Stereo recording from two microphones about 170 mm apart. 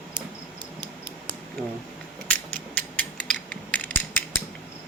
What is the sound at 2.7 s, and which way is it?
Tick-tock, 10° left (ahead or behind).